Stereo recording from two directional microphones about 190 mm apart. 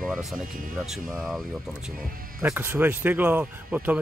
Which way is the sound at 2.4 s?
10° right (ahead or behind).